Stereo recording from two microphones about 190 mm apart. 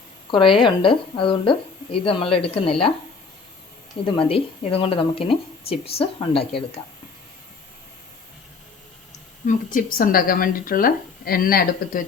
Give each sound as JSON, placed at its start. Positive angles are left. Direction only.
{"t": 0.3, "sound": "speech", "side_deg": 25}
{"t": 4.0, "sound": "speech", "side_deg": 25}
{"t": 9.5, "sound": "speech", "side_deg": 45}